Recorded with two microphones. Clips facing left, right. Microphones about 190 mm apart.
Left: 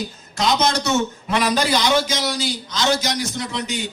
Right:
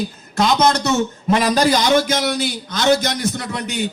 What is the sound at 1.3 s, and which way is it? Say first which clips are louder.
A man's voice: right 4 dB; 45° right (ahead or behind).